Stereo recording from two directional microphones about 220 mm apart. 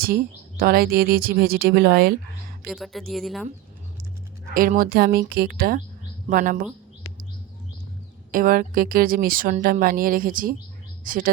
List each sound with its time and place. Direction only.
0.0 s speech: 40° right (ahead or behind)
2.6 s speech: centre (ahead or behind)
4.5 s a woman's voice: 40° right (ahead or behind)
8.3 s a woman's voice: 40° right (ahead or behind)